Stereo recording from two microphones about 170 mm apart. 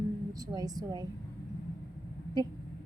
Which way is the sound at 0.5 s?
20° right (ahead or behind).